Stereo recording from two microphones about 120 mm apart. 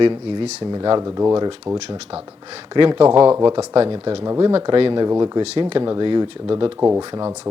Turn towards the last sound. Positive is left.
turn(degrees=-20)  # may be behind; listen again after turning